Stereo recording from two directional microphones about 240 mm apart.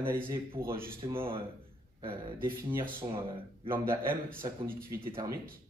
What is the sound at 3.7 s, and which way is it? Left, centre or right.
Speech, centre.